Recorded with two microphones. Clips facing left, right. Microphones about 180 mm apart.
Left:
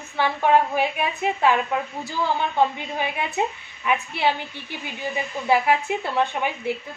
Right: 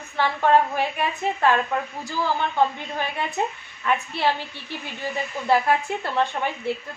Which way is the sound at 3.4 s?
15° left (ahead or behind).